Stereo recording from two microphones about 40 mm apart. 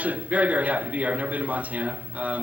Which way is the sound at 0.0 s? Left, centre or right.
Right.